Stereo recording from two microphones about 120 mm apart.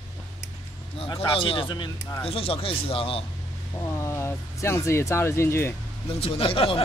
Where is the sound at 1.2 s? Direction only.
45° left (ahead or behind).